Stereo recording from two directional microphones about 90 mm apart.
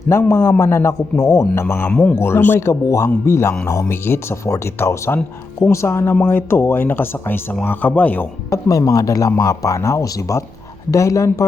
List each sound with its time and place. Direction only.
0.1 s speech: 30° left (ahead or behind)
1.9 s speech: 15° left (ahead or behind)
2.1 s speech: 25° left (ahead or behind)
8.4 s speech: 35° left (ahead or behind)